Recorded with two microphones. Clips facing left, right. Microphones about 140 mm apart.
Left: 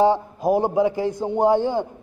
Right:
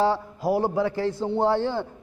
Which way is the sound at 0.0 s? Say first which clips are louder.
Left 5 dB; 20° left (ahead or behind).